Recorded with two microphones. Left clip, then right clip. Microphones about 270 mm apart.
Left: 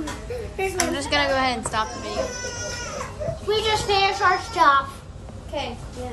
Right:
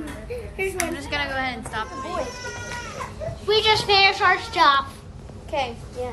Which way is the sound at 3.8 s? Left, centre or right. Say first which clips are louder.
Right 2 dB; left.